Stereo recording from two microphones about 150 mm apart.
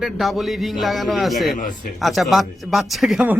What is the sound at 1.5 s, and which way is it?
Speech, 60° left (ahead or behind).